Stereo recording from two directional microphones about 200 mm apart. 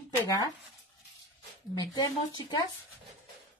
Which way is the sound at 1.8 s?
20° left (ahead or behind).